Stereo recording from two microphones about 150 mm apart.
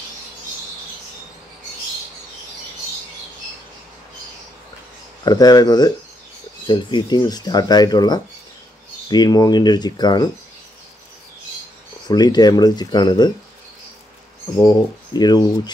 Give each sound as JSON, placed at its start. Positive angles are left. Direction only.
{"t": 5.2, "sound": "speech", "side_deg": 25}
{"t": 12.1, "sound": "speech", "side_deg": 25}
{"t": 15.1, "sound": "speech", "side_deg": 25}